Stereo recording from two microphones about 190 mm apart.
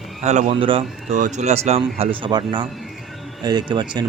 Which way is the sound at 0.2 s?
40° right (ahead or behind).